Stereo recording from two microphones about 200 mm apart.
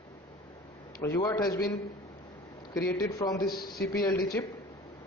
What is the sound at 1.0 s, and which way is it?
Speech, 15° left (ahead or behind).